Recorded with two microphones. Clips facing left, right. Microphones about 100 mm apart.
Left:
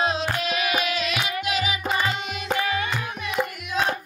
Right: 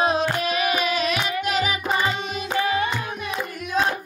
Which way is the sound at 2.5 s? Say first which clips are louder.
Right 3 dB; 25° right (ahead or behind).